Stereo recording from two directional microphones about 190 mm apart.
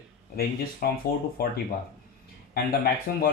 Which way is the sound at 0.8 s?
50° left (ahead or behind).